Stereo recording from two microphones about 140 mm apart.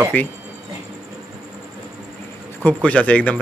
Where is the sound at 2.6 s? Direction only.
10° left (ahead or behind).